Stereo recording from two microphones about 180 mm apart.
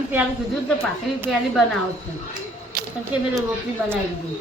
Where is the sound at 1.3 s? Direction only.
Centre (ahead or behind).